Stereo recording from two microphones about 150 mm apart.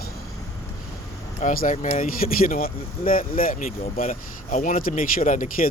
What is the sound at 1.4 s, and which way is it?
Speech, 60° left (ahead or behind).